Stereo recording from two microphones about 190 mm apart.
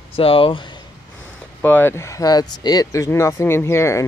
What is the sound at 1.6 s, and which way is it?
Speech, 10° left (ahead or behind).